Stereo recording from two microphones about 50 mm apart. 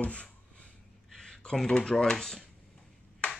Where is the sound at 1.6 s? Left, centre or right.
Centre.